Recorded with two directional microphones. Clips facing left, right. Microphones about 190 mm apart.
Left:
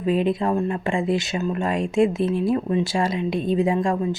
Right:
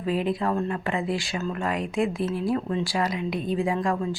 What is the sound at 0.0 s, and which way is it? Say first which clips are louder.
Speech: left 4 dB; 20° left (ahead or behind).